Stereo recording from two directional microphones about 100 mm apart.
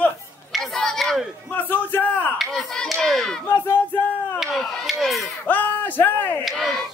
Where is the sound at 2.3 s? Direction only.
5° left (ahead or behind).